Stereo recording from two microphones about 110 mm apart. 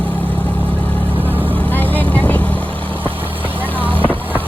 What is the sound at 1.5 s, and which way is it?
Vehicle, 15° left (ahead or behind).